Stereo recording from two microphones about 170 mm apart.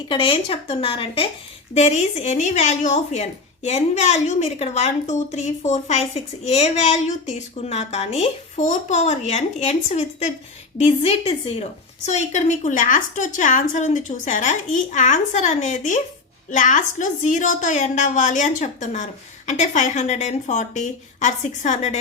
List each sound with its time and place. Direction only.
0.1 s a woman's voice: 30° left (ahead or behind)